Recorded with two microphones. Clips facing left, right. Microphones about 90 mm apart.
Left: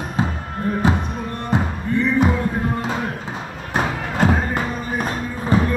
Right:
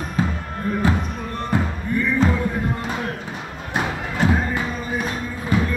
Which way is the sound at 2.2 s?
10° left (ahead or behind).